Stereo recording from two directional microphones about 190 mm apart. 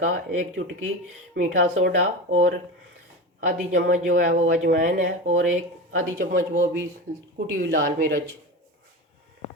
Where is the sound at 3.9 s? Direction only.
45° right (ahead or behind).